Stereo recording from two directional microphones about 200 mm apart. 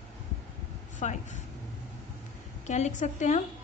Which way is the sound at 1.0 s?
35° left (ahead or behind).